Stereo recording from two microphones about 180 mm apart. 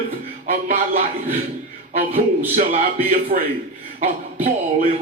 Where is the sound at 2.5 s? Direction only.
50° right (ahead or behind).